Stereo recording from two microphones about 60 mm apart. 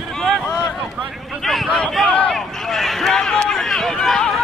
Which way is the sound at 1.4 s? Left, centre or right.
Centre.